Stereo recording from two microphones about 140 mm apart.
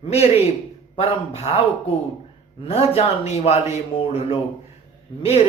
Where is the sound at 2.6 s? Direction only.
45° left (ahead or behind).